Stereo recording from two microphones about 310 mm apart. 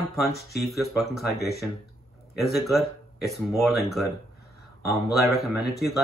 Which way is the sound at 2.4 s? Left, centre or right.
Centre.